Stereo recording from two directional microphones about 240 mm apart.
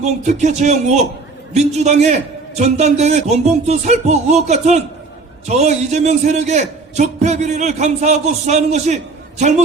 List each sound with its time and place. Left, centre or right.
0.0 s a man's voice: right